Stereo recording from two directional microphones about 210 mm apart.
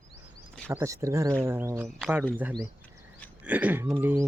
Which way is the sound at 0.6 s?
10° right (ahead or behind).